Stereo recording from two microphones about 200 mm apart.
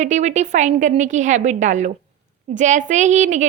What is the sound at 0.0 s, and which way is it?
A woman's voice, 35° right (ahead or behind).